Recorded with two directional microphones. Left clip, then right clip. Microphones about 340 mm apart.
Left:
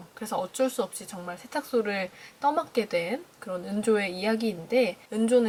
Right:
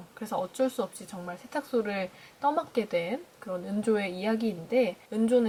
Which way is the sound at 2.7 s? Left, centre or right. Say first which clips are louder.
Left 2 dB; centre.